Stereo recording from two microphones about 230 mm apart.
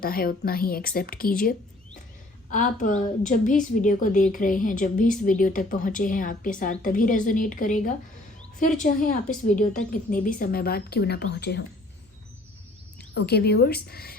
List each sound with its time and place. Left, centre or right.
0.0 s a woman's voice: left
13.1 s speech: left